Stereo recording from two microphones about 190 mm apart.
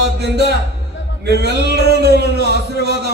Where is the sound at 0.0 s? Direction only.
60° right (ahead or behind).